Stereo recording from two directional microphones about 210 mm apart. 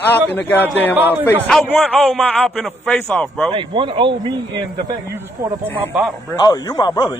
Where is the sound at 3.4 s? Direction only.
25° right (ahead or behind).